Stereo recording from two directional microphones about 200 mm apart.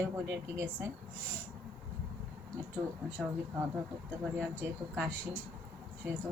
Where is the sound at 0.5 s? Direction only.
15° right (ahead or behind).